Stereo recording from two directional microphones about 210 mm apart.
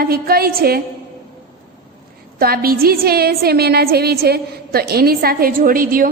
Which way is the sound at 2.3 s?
45° right (ahead or behind).